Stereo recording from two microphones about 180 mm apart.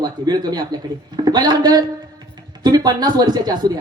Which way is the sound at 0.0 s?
20° right (ahead or behind).